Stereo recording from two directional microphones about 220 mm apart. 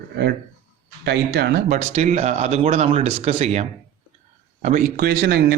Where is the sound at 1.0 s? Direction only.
50° right (ahead or behind).